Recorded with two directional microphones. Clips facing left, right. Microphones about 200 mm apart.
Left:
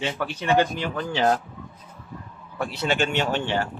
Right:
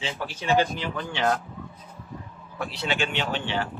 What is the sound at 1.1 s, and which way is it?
Speech, 35° left (ahead or behind).